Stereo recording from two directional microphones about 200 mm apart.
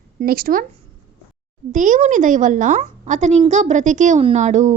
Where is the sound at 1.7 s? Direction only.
40° right (ahead or behind).